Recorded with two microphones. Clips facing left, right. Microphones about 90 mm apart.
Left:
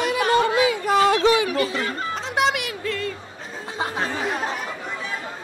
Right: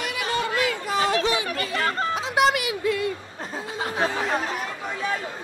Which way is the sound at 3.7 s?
25° left (ahead or behind).